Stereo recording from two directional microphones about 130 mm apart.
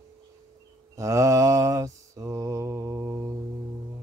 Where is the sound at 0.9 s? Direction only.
25° right (ahead or behind).